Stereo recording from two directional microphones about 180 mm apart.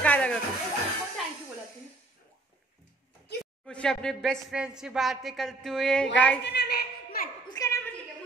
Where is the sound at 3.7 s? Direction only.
5° left (ahead or behind).